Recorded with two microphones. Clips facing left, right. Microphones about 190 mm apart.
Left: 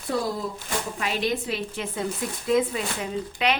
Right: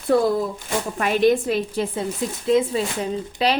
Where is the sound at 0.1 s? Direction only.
55° right (ahead or behind).